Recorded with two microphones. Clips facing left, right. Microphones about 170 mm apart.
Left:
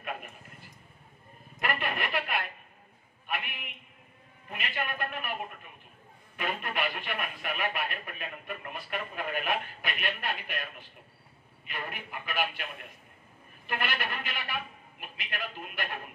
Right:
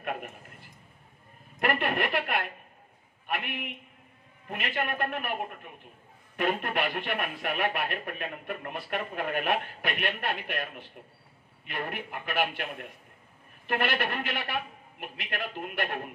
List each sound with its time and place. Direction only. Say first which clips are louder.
1.6 s a man's voice: right 5 dB; 50° right (ahead or behind)
13.7 s a man's voice: right 5 dB; 60° right (ahead or behind)